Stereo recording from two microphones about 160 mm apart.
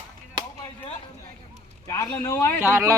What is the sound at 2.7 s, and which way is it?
Speech, 15° right (ahead or behind).